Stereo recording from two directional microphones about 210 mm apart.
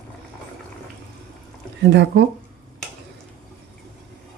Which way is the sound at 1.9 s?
55° right (ahead or behind).